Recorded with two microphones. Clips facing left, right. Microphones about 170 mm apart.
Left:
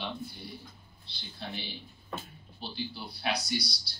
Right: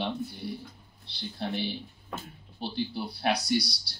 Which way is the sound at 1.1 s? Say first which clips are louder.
Right 8 dB; 60° right (ahead or behind).